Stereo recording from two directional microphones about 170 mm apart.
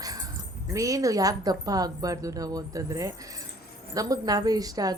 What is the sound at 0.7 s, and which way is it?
Speech, 20° right (ahead or behind).